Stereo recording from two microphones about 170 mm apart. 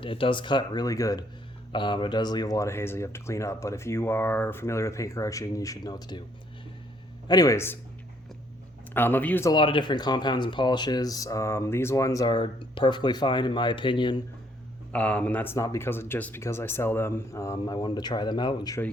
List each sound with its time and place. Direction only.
0.0 s speech: 30° left (ahead or behind)
7.3 s speech: 20° left (ahead or behind)
8.9 s speech: 10° left (ahead or behind)
9.5 s speech: 30° left (ahead or behind)
14.9 s speech: 10° left (ahead or behind); by 18.8 s 25° left (ahead or behind)